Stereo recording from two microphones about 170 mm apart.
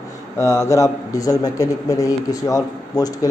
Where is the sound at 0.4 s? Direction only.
15° left (ahead or behind).